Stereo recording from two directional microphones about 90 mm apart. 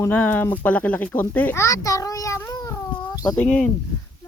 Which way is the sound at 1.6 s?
35° left (ahead or behind).